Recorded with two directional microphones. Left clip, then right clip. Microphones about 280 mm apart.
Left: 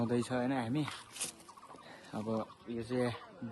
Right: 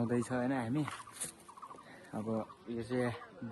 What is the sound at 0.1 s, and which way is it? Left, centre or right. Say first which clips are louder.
Speech: left 1 dB; centre.